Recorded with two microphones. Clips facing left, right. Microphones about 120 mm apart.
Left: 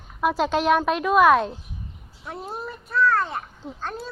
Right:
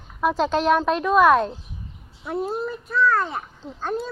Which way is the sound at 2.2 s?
Centre (ahead or behind).